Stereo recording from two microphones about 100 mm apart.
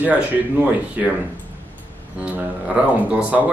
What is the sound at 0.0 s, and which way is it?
Speech, 15° right (ahead or behind).